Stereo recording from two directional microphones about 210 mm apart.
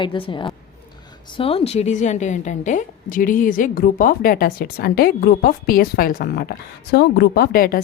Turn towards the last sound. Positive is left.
turn(degrees=45)  # may be behind; listen again after turning